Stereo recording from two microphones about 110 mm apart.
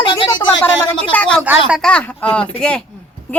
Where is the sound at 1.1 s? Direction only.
10° left (ahead or behind).